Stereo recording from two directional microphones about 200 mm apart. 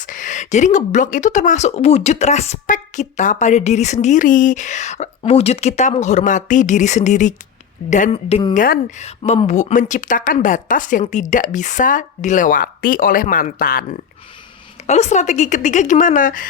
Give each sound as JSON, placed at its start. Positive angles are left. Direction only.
{"t": 0.0, "sound": "speech", "side_deg": 40}
{"t": 8.5, "sound": "a woman's voice", "side_deg": 45}
{"t": 14.8, "sound": "speech", "side_deg": 35}